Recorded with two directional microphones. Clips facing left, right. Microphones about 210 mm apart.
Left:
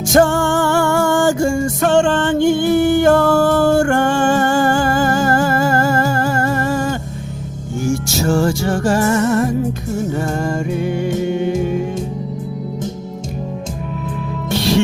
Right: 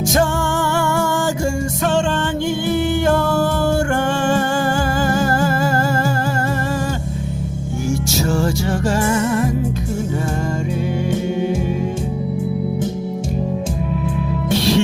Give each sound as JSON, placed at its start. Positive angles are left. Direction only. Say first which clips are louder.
{"t": 0.1, "sound": "music", "louder": "left 8 dB", "side_deg": 50}
{"t": 7.9, "sound": "music", "louder": "left 3 dB", "side_deg": 50}